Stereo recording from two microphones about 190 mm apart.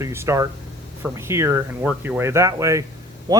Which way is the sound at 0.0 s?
15° right (ahead or behind).